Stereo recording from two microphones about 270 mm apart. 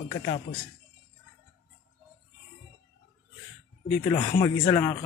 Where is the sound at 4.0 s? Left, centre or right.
Centre.